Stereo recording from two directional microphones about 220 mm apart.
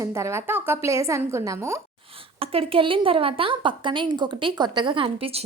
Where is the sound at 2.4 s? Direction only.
25° right (ahead or behind).